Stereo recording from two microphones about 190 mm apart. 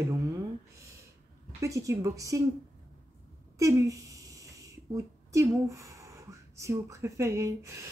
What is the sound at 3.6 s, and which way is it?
Speech, 15° right (ahead or behind).